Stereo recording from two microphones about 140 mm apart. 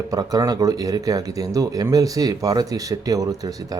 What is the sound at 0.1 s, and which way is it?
Speech, 25° right (ahead or behind).